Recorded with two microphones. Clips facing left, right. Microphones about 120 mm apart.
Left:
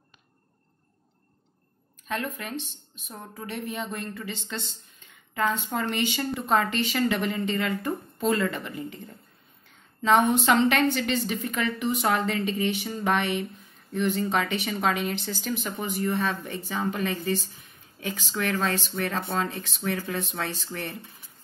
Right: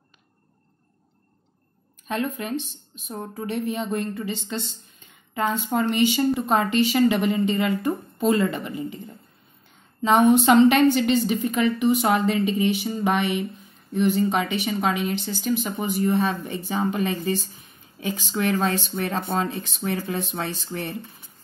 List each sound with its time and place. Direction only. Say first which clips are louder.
2.0 s a woman's voice: right 5 dB; 20° right (ahead or behind); by 15.7 s 5° right (ahead or behind)
15.8 s speech: right 4 dB; 20° right (ahead or behind)